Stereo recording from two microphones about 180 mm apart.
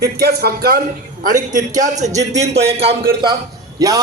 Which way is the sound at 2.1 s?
20° right (ahead or behind).